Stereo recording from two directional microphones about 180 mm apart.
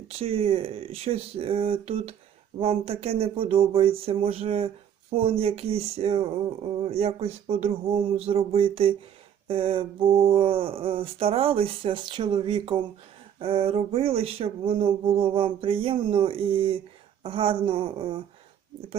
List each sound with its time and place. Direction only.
0.1 s speech: 30° right (ahead or behind)